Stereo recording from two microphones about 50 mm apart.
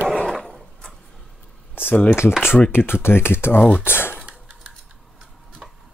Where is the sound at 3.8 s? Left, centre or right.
Left.